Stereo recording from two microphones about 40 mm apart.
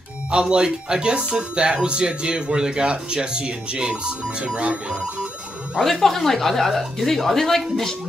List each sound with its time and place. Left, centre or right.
0.3 s speech: right
5.8 s speech: centre